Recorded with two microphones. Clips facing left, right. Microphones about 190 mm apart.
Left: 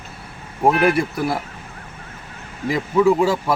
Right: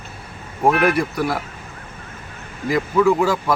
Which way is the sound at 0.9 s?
Centre (ahead or behind).